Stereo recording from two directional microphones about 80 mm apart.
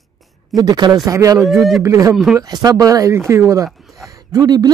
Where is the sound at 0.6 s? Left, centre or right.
Right.